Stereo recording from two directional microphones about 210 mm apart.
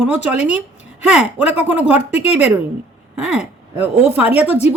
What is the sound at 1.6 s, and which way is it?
A woman's voice, 5° right (ahead or behind).